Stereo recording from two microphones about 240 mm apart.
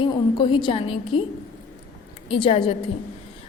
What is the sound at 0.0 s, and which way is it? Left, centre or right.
Speech, centre.